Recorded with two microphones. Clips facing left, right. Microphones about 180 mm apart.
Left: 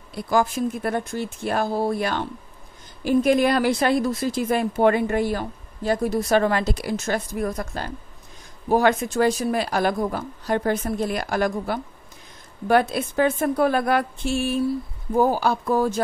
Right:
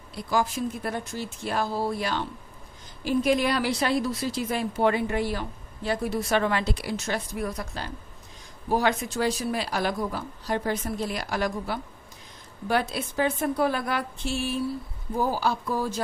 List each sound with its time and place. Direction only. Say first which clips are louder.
0.1 s a woman's voice: left 5 dB; 50° left (ahead or behind)